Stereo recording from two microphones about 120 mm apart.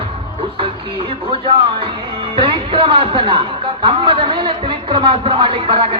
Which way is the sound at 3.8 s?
45° right (ahead or behind).